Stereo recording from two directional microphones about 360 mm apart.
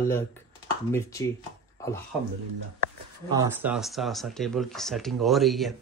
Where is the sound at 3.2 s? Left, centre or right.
Centre.